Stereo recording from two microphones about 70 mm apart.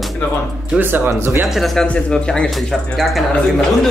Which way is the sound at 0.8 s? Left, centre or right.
Right.